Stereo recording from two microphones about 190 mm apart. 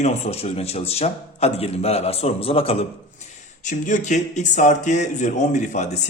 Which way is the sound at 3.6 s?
40° left (ahead or behind).